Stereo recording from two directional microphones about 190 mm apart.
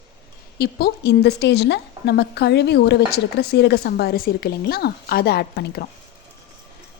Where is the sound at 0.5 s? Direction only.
55° left (ahead or behind).